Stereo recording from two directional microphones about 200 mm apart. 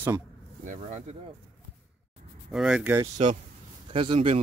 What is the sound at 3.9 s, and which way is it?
Speech, 25° right (ahead or behind).